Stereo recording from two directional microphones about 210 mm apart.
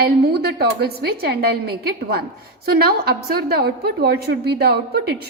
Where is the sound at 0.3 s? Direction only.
50° right (ahead or behind).